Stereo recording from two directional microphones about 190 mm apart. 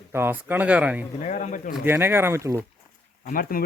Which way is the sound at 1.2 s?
40° left (ahead or behind).